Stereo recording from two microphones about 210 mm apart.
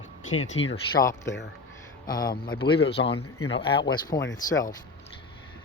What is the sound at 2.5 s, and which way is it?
Speech, 25° left (ahead or behind).